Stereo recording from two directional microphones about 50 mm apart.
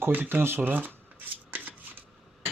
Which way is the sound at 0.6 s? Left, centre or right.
Right.